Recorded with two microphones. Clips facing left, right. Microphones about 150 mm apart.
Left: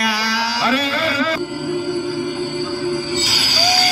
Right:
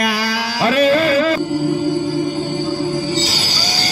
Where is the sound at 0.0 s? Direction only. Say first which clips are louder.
Right 2 dB; 50° right (ahead or behind).